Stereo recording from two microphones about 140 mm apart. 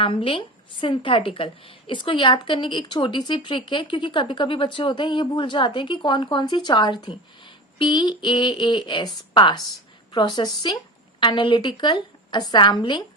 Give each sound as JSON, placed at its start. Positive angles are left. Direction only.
{"t": 0.0, "sound": "a woman's voice", "side_deg": 40}